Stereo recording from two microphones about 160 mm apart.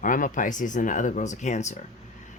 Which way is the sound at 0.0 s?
55° left (ahead or behind).